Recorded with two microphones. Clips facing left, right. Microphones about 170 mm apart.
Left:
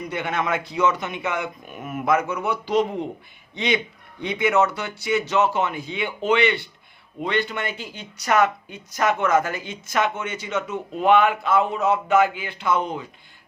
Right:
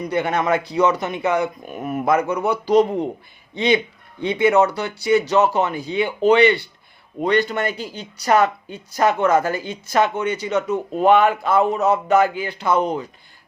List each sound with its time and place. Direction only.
0.1 s speech: 40° right (ahead or behind)